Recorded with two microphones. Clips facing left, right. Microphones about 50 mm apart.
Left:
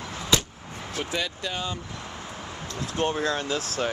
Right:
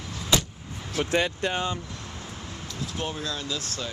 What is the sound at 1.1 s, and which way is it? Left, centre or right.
Speech, right.